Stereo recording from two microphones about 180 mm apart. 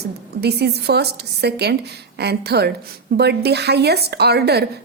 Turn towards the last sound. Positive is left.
turn(degrees=-65)  # may be behind; listen again after turning